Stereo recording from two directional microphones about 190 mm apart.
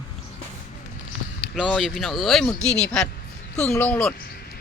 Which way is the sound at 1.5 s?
Centre (ahead or behind).